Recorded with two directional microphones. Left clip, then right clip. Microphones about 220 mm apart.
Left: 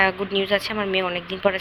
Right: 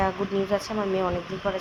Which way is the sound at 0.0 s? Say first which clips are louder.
Left 5 dB; 40° left (ahead or behind).